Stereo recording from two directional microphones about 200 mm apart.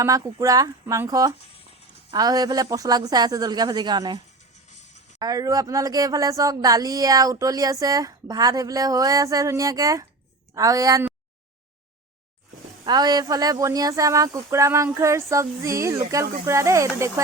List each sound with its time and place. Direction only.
0.0 s speech: 15° right (ahead or behind)
5.2 s speech: 20° right (ahead or behind)
12.8 s speech: 20° right (ahead or behind)